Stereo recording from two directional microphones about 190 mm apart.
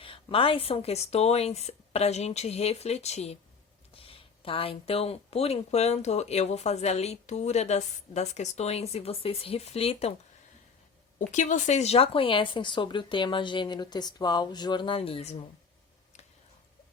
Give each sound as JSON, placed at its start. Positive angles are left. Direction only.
{"t": 0.0, "sound": "speech", "side_deg": 30}
{"t": 11.3, "sound": "speech", "side_deg": 40}